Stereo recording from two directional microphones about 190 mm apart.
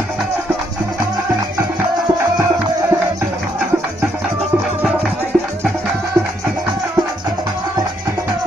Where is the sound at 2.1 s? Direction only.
20° right (ahead or behind).